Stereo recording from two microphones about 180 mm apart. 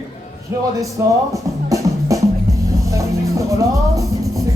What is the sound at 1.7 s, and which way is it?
Music, 20° right (ahead or behind).